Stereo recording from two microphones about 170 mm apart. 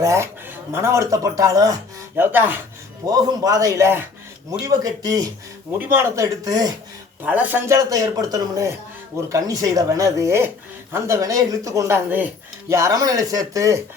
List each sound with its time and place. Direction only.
0.0 s speech: 15° right (ahead or behind)
7.2 s speech: 10° right (ahead or behind)